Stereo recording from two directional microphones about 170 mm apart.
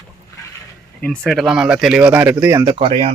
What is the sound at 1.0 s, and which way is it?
Speech, 5° left (ahead or behind).